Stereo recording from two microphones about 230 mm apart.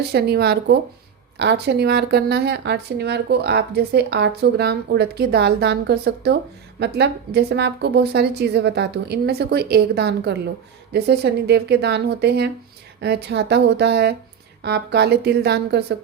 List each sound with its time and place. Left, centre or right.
0.0 s speech: right